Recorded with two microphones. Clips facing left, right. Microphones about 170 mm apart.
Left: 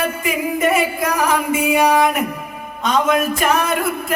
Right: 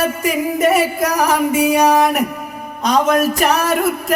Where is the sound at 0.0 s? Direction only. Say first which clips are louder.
Right 3 dB; 40° right (ahead or behind).